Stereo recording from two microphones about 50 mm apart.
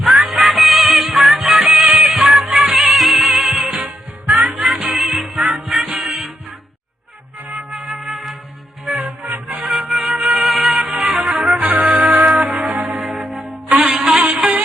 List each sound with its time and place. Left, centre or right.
0.0 s music: centre
7.7 s music: centre
9.6 s music: centre
12.8 s church bell: centre
13.7 s music: centre
14.2 s music: right